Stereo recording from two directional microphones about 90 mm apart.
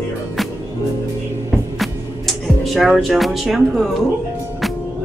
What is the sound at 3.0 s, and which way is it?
Speech, centre (ahead or behind).